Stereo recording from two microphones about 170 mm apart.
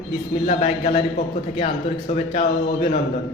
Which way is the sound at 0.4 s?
45° left (ahead or behind).